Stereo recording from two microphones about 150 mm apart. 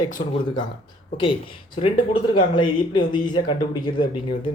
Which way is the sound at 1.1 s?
35° left (ahead or behind).